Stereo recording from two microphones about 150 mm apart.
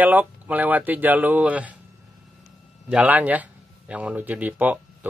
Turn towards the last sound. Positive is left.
turn(degrees=-10)  # may be behind; listen again after turning